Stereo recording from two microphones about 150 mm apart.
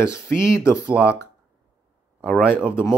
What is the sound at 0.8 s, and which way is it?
Speech, 5° right (ahead or behind).